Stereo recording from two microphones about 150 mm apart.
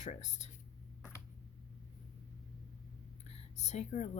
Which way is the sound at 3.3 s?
45° left (ahead or behind).